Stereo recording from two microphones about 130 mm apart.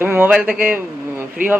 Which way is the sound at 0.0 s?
15° right (ahead or behind).